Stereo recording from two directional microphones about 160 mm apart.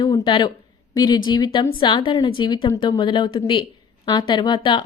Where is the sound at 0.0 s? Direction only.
30° left (ahead or behind).